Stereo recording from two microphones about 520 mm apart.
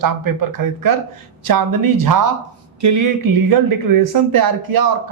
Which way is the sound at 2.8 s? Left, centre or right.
Right.